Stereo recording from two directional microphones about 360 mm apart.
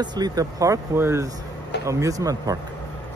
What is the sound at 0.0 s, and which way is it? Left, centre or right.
Speech, centre.